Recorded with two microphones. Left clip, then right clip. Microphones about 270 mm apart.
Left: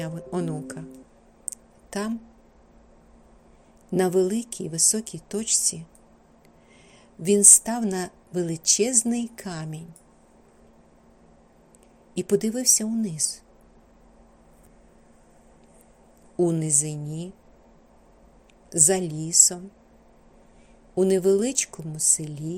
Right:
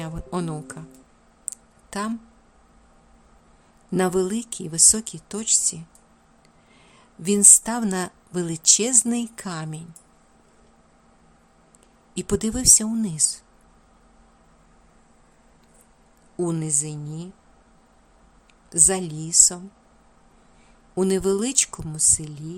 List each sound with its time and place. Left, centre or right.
0.0 s speech: centre
1.5 s a sound: centre
3.9 s speech: centre
7.2 s speech: centre
12.1 s speech: centre
16.4 s speech: centre
18.7 s speech: centre
20.9 s speech: centre